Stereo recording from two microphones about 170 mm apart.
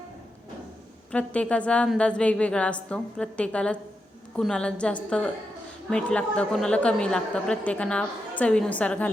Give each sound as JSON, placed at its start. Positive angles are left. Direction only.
{"t": 1.1, "sound": "a woman's voice", "side_deg": 5}